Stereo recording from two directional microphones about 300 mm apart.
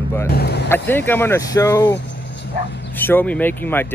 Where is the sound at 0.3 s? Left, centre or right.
Left.